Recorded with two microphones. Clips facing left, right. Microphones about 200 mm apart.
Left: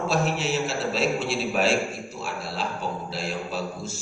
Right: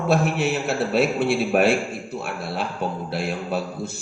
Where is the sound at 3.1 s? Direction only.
60° right (ahead or behind).